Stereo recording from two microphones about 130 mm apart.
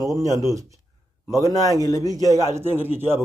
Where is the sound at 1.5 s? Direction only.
25° left (ahead or behind).